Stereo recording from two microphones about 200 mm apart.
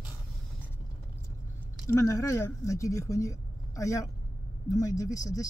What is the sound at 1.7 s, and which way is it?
Speech, 15° left (ahead or behind).